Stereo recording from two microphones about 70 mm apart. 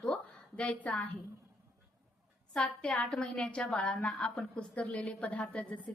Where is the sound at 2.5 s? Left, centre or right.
Centre.